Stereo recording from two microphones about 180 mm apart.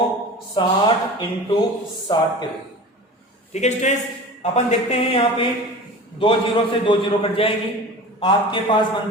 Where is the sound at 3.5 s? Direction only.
40° left (ahead or behind).